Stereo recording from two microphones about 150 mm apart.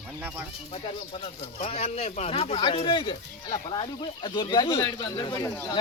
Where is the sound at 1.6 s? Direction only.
45° left (ahead or behind); by 3.1 s 30° left (ahead or behind).